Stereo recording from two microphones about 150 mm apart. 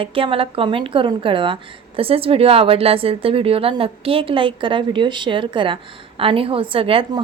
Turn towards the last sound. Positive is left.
turn(degrees=-35)  # may be behind; listen again after turning